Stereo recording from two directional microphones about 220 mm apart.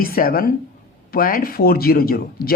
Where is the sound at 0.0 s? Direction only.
40° left (ahead or behind).